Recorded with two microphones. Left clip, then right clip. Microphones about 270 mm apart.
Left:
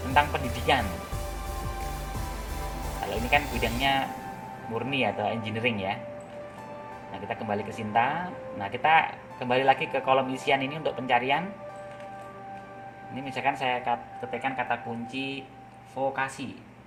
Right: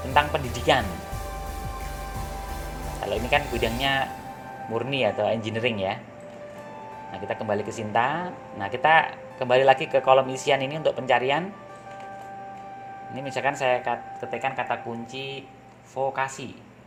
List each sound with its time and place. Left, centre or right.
0.1 s speech: right
3.2 s speech: right
7.3 s speech: right
13.1 s speech: right